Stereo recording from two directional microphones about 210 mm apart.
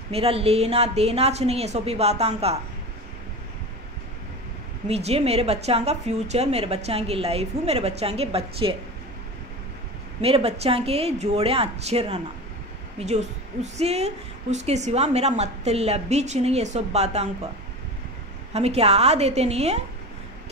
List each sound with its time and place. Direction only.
0.1 s a woman's voice: 30° right (ahead or behind)
4.8 s a woman's voice: 30° right (ahead or behind)
10.2 s a woman's voice: 30° right (ahead or behind)
18.5 s a woman's voice: 30° right (ahead or behind)